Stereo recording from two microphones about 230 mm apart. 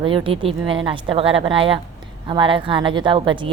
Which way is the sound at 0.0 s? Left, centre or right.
Right.